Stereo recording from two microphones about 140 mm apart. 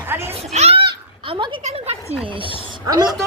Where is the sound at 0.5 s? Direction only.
50° right (ahead or behind).